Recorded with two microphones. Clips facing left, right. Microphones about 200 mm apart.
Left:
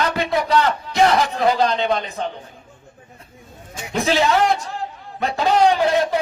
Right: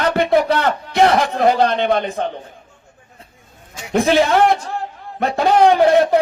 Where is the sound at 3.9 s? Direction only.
55° right (ahead or behind).